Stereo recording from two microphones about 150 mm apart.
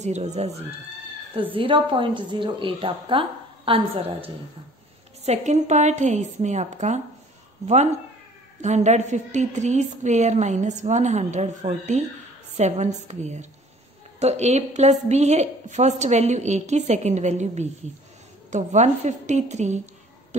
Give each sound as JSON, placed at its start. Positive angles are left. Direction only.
{"t": 0.0, "sound": "a woman's voice", "side_deg": -50}